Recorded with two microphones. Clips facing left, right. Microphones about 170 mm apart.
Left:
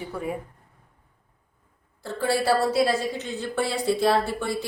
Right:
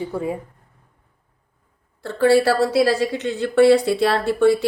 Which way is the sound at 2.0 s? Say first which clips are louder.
Right 8 dB; 75° right (ahead or behind).